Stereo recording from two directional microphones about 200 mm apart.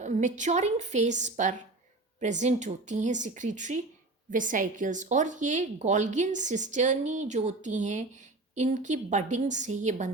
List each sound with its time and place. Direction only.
0.0 s speech: 35° right (ahead or behind)